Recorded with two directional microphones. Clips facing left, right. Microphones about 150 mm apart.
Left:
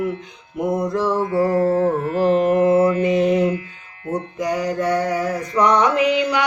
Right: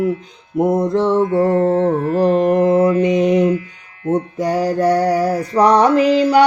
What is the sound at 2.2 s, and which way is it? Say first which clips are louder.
Mantra: right 1 dB; 20° right (ahead or behind).